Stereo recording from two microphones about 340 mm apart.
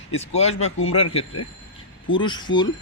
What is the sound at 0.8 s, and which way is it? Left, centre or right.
Speech, left.